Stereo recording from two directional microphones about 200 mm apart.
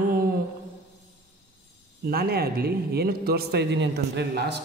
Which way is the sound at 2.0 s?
50° right (ahead or behind).